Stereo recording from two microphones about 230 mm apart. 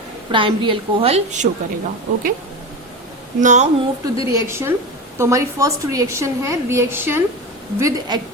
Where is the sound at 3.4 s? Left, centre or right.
Right.